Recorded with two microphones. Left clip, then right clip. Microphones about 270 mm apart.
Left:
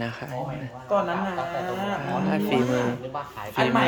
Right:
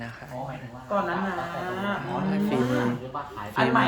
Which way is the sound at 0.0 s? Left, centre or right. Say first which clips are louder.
Left 7 dB; left.